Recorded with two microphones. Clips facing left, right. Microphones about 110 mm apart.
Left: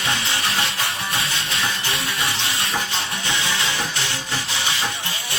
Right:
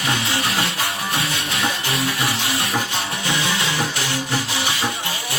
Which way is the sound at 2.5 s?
25° right (ahead or behind).